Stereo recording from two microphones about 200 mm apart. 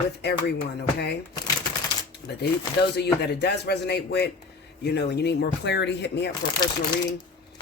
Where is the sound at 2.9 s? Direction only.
55° left (ahead or behind).